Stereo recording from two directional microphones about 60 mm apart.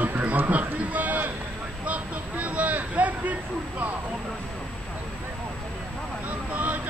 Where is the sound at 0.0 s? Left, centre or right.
Right.